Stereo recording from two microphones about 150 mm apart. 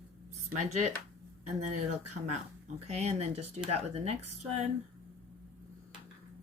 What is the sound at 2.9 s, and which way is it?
Speech, 45° right (ahead or behind).